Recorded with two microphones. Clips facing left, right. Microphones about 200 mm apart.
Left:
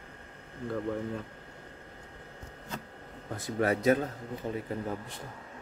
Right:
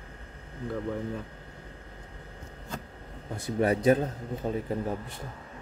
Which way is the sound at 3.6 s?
30° right (ahead or behind).